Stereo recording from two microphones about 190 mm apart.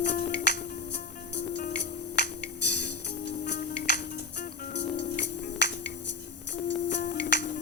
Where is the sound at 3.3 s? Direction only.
65° left (ahead or behind).